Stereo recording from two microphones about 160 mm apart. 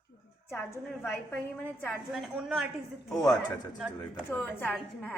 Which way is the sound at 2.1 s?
5° right (ahead or behind).